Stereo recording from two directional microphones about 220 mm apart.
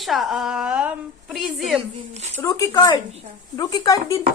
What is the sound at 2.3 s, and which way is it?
Speech, 15° left (ahead or behind).